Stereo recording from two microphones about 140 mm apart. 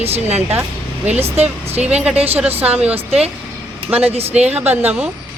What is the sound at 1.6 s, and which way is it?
Speech, 45° right (ahead or behind).